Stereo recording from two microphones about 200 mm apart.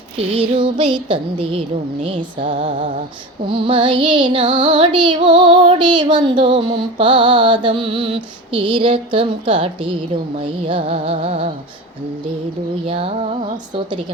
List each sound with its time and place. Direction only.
0.2 s music: 30° right (ahead or behind)
12.9 s music: 25° right (ahead or behind)